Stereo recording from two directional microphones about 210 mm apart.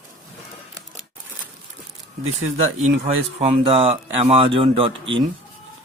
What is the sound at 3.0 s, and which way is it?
Speech, 30° right (ahead or behind).